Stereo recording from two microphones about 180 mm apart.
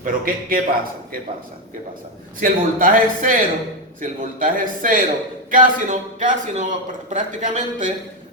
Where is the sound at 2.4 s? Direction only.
50° right (ahead or behind).